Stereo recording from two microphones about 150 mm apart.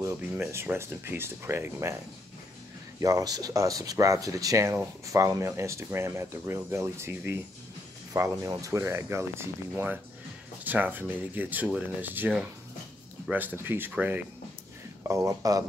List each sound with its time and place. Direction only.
0.0 s speech: 15° right (ahead or behind)
3.0 s speech: 25° right (ahead or behind)
15.0 s speech: 20° right (ahead or behind)